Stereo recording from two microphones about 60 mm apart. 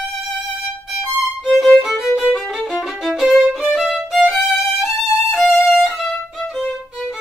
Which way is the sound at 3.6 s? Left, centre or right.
Centre.